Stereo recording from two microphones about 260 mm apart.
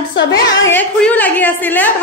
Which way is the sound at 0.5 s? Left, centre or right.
Centre.